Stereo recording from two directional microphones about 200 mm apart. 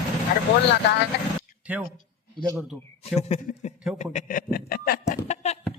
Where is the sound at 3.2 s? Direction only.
35° left (ahead or behind); by 5.0 s 50° left (ahead or behind).